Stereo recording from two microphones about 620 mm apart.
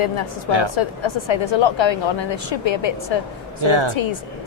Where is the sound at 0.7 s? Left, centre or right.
Left.